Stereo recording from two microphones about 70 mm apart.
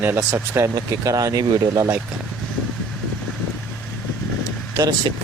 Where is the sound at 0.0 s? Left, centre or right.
Right.